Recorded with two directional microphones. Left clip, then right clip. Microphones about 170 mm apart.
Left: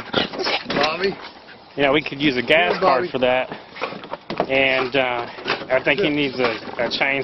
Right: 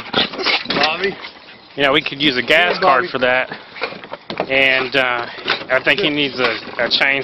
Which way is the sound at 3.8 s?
35° right (ahead or behind).